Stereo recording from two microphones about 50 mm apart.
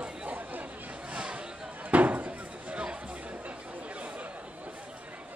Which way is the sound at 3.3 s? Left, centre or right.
Right.